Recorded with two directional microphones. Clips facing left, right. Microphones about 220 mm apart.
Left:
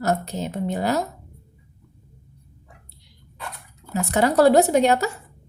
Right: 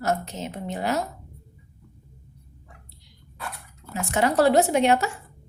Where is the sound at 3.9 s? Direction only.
40° left (ahead or behind).